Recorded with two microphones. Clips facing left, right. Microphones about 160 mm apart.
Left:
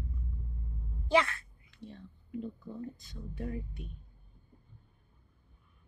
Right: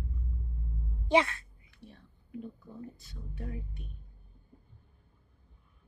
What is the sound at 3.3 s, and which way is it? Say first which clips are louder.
Speech: left 4 dB; 10° left (ahead or behind).